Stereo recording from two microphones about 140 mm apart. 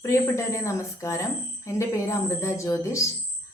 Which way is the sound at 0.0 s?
20° left (ahead or behind).